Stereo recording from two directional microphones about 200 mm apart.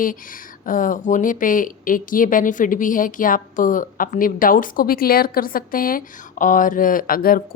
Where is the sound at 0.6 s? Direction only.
40° left (ahead or behind).